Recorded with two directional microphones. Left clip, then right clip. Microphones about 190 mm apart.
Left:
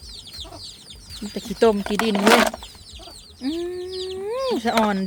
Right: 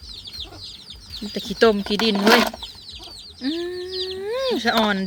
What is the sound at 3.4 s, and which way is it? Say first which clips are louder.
Chicken: right 1 dB; 5° left (ahead or behind).